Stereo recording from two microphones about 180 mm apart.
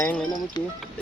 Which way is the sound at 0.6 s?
25° left (ahead or behind).